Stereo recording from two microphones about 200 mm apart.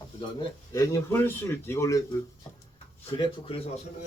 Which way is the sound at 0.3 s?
15° left (ahead or behind).